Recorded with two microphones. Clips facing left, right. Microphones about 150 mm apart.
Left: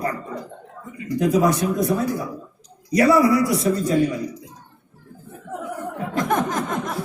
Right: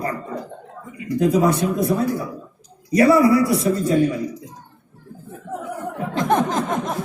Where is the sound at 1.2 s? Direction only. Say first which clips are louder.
Right 1 dB; 30° right (ahead or behind).